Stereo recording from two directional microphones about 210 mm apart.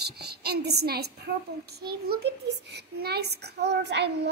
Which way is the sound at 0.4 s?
50° right (ahead or behind).